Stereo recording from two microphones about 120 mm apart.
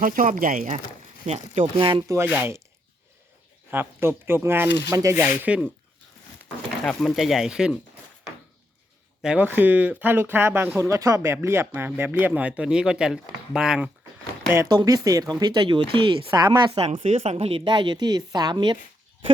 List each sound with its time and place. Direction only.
0.2 s speech: 90° right
1.6 s speech: 45° right (ahead or behind)
2.0 s speech: 20° right (ahead or behind)
3.7 s speech: 20° right (ahead or behind)
6.8 s speech: centre (ahead or behind)
9.2 s speech: 10° right (ahead or behind)
14.7 s a woman's voice: 35° right (ahead or behind)
16.7 s a woman's voice: 55° right (ahead or behind); by 18.8 s 40° right (ahead or behind)